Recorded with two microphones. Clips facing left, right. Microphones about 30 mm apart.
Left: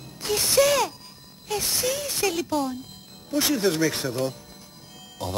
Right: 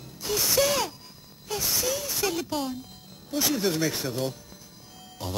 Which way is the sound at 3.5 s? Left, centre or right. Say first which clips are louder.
Left 3 dB; centre.